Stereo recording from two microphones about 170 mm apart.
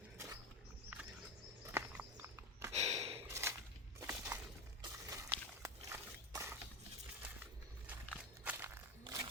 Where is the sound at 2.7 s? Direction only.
40° right (ahead or behind).